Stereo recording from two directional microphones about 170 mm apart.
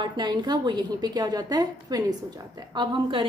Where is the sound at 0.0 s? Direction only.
25° right (ahead or behind).